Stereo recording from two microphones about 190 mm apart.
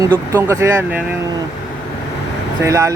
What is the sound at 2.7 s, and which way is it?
Speech, 15° right (ahead or behind).